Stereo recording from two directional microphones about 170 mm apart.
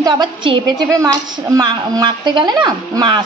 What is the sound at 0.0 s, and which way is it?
A woman's voice, 25° right (ahead or behind).